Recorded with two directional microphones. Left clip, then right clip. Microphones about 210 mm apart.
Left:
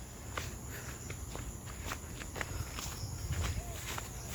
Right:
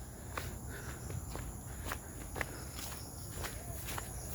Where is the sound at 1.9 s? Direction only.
10° right (ahead or behind).